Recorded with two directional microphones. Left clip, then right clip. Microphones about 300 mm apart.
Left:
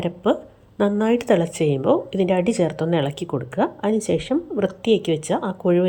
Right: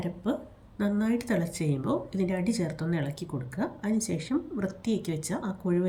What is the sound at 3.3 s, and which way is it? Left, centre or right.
Speech, left.